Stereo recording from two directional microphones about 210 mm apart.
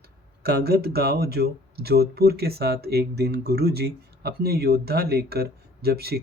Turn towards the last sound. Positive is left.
turn(degrees=-50)  # may be behind; listen again after turning